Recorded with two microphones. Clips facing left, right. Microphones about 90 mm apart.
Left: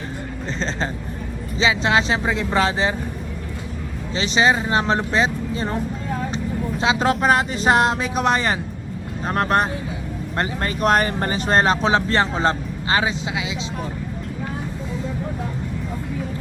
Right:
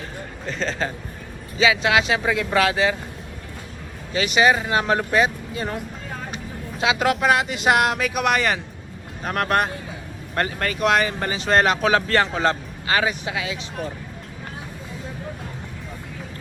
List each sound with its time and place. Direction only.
0.4 s speech: 30° left (ahead or behind)
4.1 s speech: 25° left (ahead or behind)
10.8 s speech: 40° left (ahead or behind); by 13.7 s 20° left (ahead or behind)